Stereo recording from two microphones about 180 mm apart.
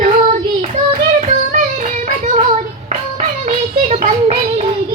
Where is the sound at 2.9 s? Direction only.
40° right (ahead or behind).